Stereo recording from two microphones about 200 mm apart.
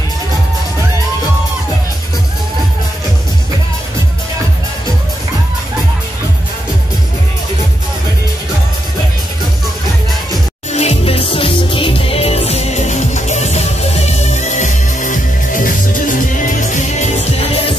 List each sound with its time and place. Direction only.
10.7 s music: 30° left (ahead or behind)